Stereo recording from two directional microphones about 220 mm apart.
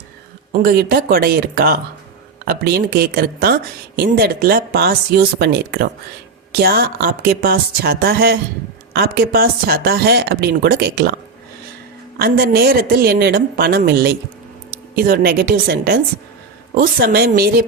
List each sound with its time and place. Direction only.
0.5 s speech: 40° right (ahead or behind)
12.2 s speech: 45° right (ahead or behind)